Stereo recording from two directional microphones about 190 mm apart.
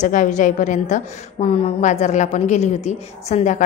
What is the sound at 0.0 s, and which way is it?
A woman's voice, 40° left (ahead or behind).